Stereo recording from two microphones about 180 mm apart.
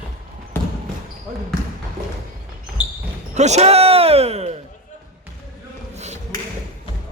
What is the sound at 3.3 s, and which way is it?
Basketball bounce, 40° right (ahead or behind).